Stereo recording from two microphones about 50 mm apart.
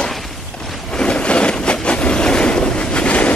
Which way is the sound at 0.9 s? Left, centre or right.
Left.